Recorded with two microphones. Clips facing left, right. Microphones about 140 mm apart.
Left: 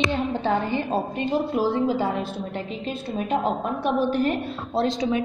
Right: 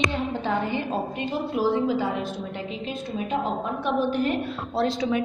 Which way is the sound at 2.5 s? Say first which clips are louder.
Left 2 dB; 40° left (ahead or behind).